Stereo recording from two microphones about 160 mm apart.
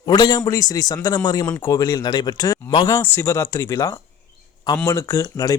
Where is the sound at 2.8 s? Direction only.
15° left (ahead or behind).